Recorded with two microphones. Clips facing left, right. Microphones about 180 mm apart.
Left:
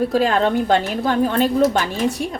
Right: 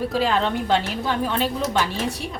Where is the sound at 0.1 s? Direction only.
50° left (ahead or behind).